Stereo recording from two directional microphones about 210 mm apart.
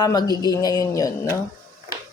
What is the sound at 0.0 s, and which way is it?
Speech, 20° left (ahead or behind).